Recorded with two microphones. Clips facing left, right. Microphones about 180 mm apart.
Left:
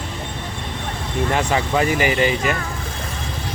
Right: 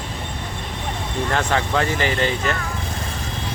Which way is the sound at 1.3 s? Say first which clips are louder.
Left 1 dB; 10° left (ahead or behind).